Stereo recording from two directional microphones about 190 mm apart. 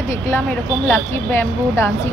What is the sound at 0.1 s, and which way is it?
Speech, 15° left (ahead or behind).